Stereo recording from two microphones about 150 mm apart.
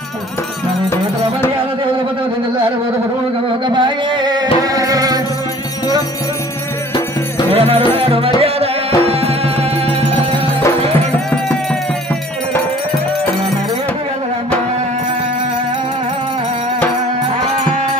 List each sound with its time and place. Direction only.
3.4 s music: 30° right (ahead or behind)
7.5 s music: 40° right (ahead or behind)